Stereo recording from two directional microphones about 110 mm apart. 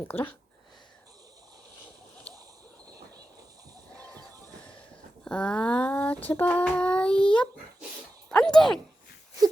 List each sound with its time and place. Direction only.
0.1 s child singing: 20° left (ahead or behind)
3.9 s music: 15° left (ahead or behind)
5.2 s child singing: 10° left (ahead or behind)